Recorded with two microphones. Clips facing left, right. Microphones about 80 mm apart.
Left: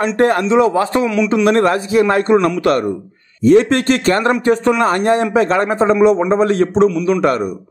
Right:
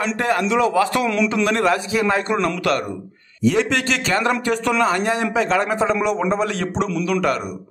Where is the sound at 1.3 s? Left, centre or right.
Left.